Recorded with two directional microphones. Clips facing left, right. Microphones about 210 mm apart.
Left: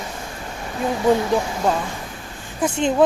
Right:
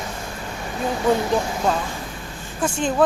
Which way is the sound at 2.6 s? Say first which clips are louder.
Left 3 dB; 20° left (ahead or behind).